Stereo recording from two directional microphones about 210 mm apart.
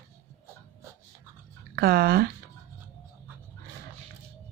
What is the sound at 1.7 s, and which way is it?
Speech, 50° right (ahead or behind).